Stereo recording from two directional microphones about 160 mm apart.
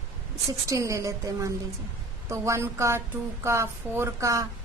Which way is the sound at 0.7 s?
20° right (ahead or behind).